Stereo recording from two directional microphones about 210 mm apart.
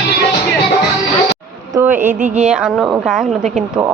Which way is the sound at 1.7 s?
10° right (ahead or behind).